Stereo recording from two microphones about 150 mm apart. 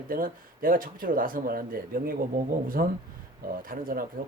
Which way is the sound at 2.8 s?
90° right.